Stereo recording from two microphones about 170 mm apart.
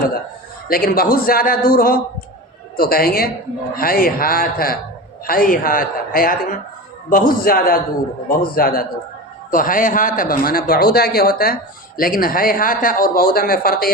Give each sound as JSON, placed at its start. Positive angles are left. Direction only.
{"t": 0.7, "sound": "a man's voice", "side_deg": 60}